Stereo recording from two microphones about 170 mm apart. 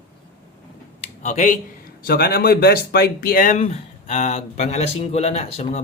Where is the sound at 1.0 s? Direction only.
45° left (ahead or behind).